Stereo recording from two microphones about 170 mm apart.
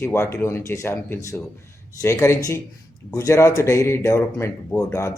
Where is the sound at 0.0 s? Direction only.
15° left (ahead or behind).